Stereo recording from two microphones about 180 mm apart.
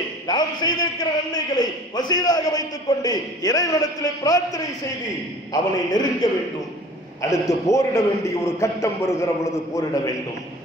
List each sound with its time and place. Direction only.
0.3 s a man's voice: 25° left (ahead or behind)
7.2 s a man's voice: 20° left (ahead or behind)